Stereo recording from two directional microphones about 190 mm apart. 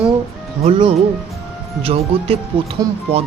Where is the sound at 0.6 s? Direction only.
30° right (ahead or behind).